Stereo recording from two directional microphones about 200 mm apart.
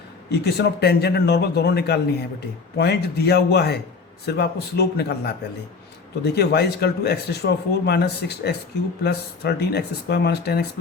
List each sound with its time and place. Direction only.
0.3 s speech: 55° left (ahead or behind)